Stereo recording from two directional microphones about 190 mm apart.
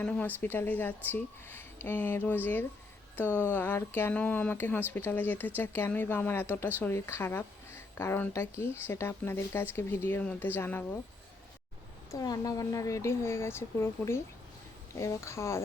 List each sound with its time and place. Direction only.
0.0 s a woman's voice: 10° left (ahead or behind)
12.1 s a woman's voice: 20° left (ahead or behind)